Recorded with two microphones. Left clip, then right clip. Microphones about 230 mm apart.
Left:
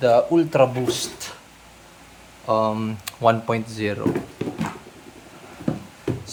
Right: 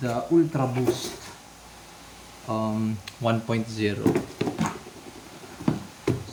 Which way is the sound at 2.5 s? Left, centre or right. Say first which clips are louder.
Left 9 dB; left.